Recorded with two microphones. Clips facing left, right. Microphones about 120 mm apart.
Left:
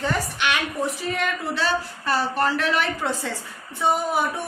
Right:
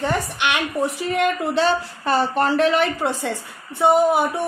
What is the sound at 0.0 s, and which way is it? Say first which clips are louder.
A woman's voice: right 3 dB; 20° right (ahead or behind).